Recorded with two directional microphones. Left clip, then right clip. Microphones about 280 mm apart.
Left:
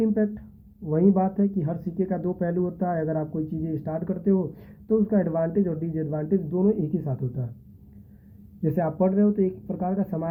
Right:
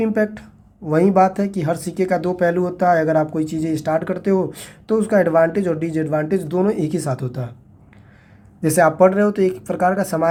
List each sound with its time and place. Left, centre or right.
0.0 s speech: centre
8.6 s speech: centre
9.5 s speech: right